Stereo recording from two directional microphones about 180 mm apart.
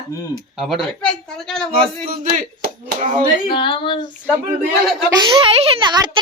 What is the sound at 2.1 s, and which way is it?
Speech, 55° right (ahead or behind).